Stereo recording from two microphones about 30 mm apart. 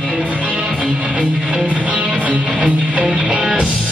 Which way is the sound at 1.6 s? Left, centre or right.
Right.